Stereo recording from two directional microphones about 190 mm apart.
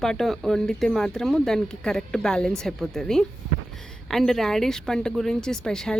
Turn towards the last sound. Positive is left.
turn(degrees=5)  # may be behind; listen again after turning